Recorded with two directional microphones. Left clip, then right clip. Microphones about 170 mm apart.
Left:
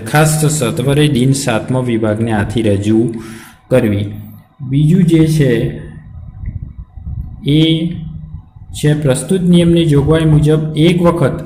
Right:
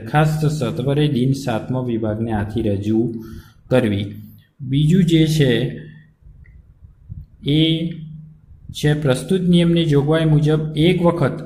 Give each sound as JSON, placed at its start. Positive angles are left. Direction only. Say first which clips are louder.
{"t": 0.0, "sound": "a man's voice", "louder": "left 6 dB", "side_deg": 0}
{"t": 7.4, "sound": "a man's voice", "louder": "left 5 dB", "side_deg": -5}